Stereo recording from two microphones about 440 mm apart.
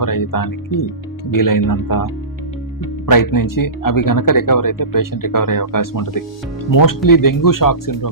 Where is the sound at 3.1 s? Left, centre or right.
Left.